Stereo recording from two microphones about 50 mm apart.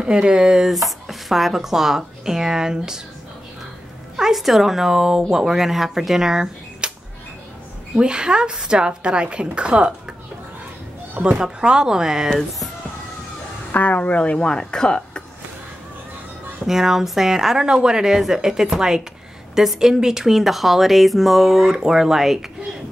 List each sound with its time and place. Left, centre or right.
0.0 s speech: centre
0.8 s speech: centre
4.2 s speech: centre
8.0 s a woman's voice: centre
11.2 s speech: centre
13.7 s speech: left; by 15.2 s centre
16.6 s a woman's voice: centre